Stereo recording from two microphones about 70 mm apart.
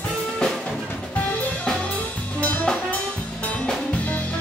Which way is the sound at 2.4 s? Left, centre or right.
Centre.